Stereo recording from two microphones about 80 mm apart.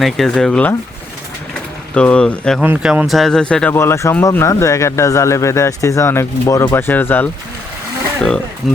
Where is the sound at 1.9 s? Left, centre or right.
Centre.